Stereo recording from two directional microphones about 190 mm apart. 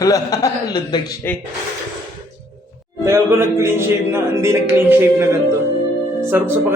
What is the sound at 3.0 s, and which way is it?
A man's voice, 15° right (ahead or behind).